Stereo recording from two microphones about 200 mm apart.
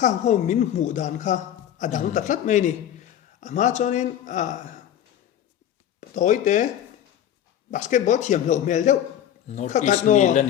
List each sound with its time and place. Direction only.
0.0 s speech: 35° left (ahead or behind)
6.1 s speech: 40° left (ahead or behind)
7.7 s speech: 40° left (ahead or behind)